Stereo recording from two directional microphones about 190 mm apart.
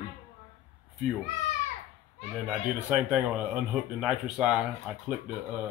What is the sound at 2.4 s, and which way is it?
Speech, 5° right (ahead or behind).